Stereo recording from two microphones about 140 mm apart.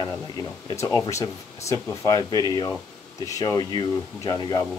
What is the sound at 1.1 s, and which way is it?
Speech, 20° left (ahead or behind).